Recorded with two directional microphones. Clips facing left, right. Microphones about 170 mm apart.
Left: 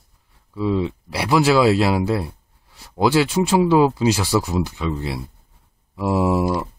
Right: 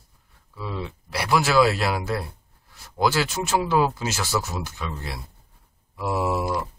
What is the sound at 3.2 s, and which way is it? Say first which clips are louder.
Speech: left 7 dB; 30° left (ahead or behind).